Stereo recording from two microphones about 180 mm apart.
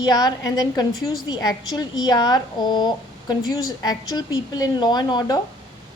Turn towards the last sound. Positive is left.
turn(degrees=25)  # may be behind; listen again after turning